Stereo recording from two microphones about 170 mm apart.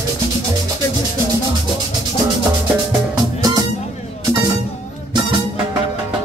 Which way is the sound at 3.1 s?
20° right (ahead or behind).